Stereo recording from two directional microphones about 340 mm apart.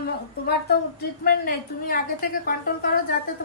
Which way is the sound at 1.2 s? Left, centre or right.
Left.